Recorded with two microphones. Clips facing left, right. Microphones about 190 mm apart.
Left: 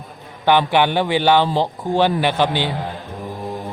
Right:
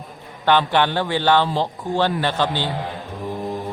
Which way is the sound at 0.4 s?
10° left (ahead or behind).